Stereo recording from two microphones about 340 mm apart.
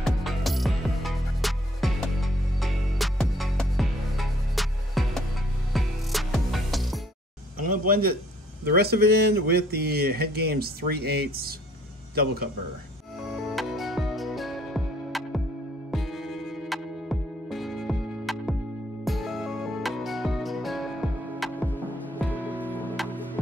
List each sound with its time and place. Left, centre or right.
0.0 s music: centre
7.6 s speech: right
13.6 s music: centre